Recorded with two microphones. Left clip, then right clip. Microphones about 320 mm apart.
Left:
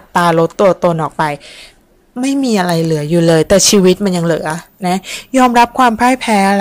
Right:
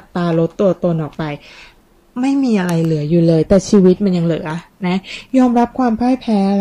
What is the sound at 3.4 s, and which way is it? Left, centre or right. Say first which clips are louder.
Speech: left 4 dB; left.